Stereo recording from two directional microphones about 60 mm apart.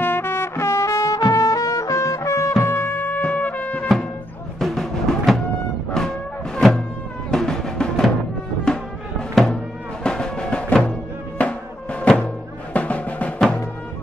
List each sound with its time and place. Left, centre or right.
0.0 s music: left
2.6 s music: left
4.6 s music: centre
9.3 s music: centre
10.0 s music: centre